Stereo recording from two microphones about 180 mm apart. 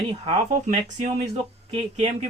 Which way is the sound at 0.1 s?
30° right (ahead or behind).